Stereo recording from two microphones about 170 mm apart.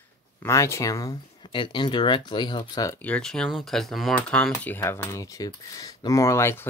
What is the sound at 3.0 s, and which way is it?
Speech, 5° left (ahead or behind).